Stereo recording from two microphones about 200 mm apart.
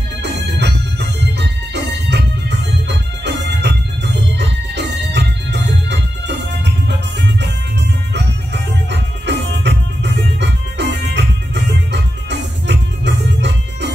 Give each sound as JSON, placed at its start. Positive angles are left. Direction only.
{"t": 0.2, "sound": "music", "side_deg": -60}
{"t": 8.9, "sound": "music", "side_deg": -60}